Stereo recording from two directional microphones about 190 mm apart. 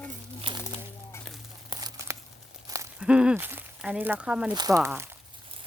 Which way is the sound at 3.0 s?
5° right (ahead or behind).